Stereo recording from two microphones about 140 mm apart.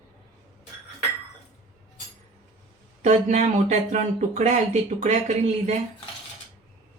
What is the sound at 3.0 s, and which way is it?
Speech, 55° right (ahead or behind).